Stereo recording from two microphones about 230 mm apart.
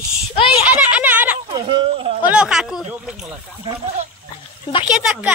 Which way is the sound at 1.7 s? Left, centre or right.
Right.